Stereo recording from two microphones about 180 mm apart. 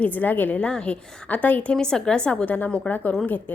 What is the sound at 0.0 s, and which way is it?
A woman's voice, 10° left (ahead or behind).